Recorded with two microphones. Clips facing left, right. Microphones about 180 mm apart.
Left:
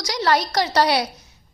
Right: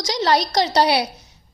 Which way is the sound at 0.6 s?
15° right (ahead or behind).